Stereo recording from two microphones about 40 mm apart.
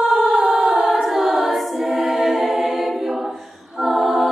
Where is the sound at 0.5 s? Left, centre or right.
Right.